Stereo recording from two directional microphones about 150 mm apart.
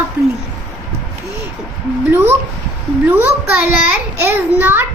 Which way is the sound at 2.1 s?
15° right (ahead or behind).